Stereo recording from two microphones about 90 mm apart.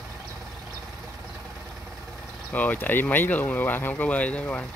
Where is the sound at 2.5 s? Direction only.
20° left (ahead or behind).